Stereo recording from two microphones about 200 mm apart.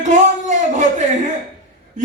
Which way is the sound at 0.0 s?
35° right (ahead or behind).